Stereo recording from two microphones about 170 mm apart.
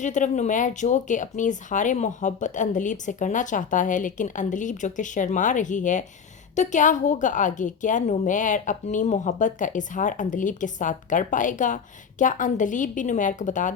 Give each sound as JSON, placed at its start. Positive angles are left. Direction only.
{"t": 0.0, "sound": "speech", "side_deg": 45}